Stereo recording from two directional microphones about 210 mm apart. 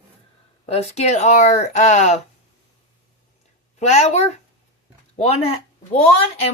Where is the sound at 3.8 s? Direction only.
30° left (ahead or behind).